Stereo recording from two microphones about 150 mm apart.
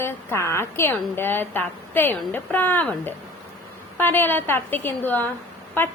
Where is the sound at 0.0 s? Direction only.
15° left (ahead or behind).